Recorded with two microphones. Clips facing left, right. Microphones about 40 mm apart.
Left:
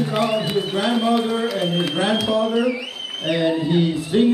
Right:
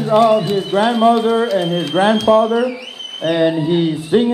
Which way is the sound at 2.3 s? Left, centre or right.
Right.